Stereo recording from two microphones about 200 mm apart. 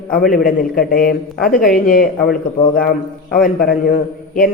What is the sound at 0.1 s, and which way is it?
Speech, 45° left (ahead or behind).